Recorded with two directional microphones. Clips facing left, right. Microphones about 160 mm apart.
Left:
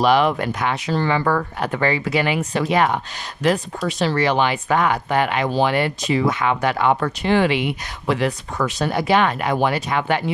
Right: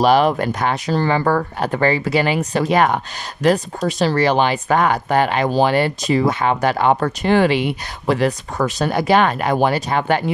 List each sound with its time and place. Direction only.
0.0 s speech: 40° right (ahead or behind)